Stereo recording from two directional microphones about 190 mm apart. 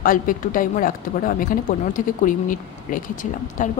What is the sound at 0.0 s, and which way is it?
Speech, 45° left (ahead or behind).